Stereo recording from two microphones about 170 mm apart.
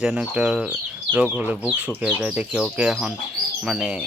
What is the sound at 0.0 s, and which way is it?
Speech, 5° right (ahead or behind).